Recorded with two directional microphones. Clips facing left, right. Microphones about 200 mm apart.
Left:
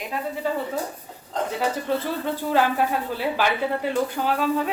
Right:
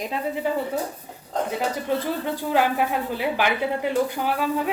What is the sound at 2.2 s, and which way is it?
Speech, 15° right (ahead or behind).